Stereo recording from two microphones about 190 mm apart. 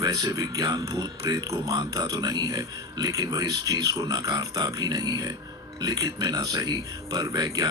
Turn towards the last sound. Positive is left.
turn(degrees=-20)  # may be behind; listen again after turning